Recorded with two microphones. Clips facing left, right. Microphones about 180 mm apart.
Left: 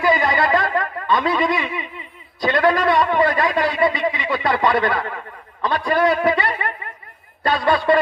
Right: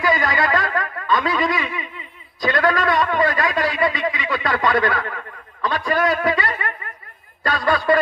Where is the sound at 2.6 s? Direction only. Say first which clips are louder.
Left 3 dB; 25° left (ahead or behind).